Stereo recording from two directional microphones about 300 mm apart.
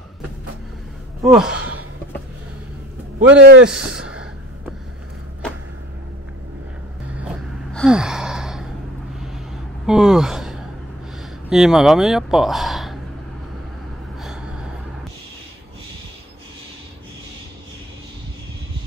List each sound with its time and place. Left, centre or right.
1.2 s speech: centre
3.3 s a man's voice: right
3.7 s a sound: centre
7.2 s gasp: centre
9.8 s speech: centre
14.2 s gasp: centre